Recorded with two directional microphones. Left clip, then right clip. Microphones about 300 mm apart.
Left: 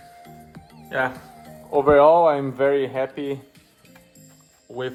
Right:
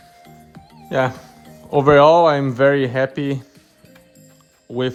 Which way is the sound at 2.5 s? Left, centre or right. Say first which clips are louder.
Right 5 dB; right.